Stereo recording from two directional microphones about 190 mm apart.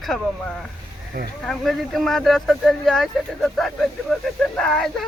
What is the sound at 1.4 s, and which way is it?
Speech, centre (ahead or behind).